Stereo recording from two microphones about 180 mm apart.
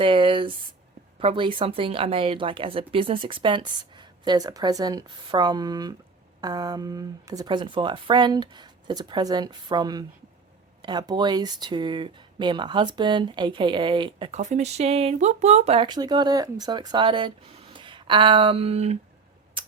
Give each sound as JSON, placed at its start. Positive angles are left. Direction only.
{"t": 0.0, "sound": "a woman's voice", "side_deg": -30}
{"t": 14.3, "sound": "speech", "side_deg": -40}